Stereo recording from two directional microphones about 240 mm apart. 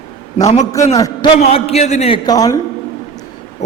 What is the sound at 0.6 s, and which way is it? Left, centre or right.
A man's voice, centre.